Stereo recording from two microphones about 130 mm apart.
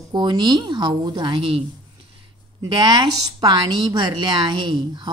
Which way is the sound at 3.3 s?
35° right (ahead or behind).